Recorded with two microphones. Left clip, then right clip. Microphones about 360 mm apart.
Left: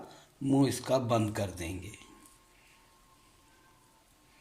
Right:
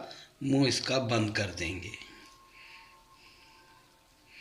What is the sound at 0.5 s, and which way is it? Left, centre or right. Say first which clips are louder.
A man's voice: even; left.